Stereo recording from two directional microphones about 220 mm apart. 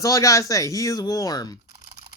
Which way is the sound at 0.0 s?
15° left (ahead or behind).